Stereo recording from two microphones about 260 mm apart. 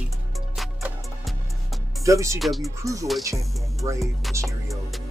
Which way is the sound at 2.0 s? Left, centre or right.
Centre.